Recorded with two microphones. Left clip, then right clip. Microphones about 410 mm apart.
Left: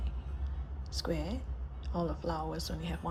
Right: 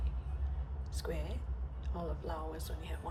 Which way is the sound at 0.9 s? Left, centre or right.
Centre.